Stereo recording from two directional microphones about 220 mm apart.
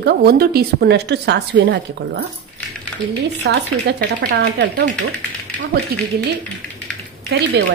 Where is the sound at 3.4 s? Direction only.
45° right (ahead or behind).